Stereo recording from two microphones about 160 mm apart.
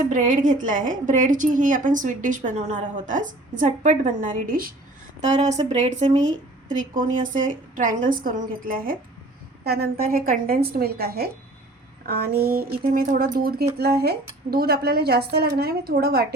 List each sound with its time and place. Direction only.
0.1 s a woman's voice: 55° right (ahead or behind)
5.2 s a woman's voice: 45° right (ahead or behind)
9.6 s a woman's voice: 80° right
13.7 s a woman's voice: 80° right